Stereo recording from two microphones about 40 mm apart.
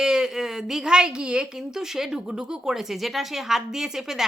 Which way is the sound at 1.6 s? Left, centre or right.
Centre.